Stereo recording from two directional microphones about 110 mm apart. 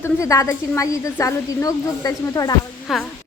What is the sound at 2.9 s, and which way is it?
Speech, centre (ahead or behind).